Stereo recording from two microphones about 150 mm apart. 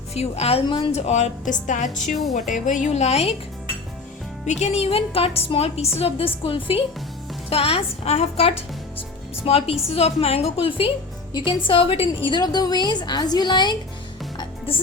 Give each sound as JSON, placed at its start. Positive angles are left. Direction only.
{"t": 0.1, "sound": "a woman's voice", "side_deg": 45}
{"t": 0.9, "sound": "a woman's voice", "side_deg": 45}
{"t": 4.6, "sound": "a woman's voice", "side_deg": 45}
{"t": 9.0, "sound": "music", "side_deg": 40}
{"t": 9.9, "sound": "a woman's voice", "side_deg": 40}